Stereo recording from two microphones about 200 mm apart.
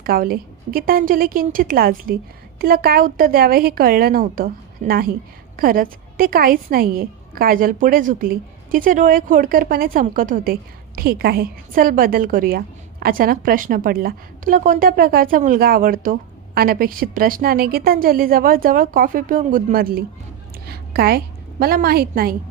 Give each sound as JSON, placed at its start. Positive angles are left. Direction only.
{"t": 0.0, "sound": "a woman's voice", "side_deg": -50}